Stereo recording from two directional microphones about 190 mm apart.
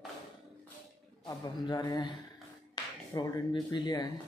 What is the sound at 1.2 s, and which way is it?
Speech, 20° left (ahead or behind).